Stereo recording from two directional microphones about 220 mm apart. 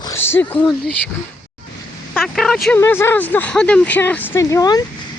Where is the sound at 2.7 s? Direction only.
10° left (ahead or behind).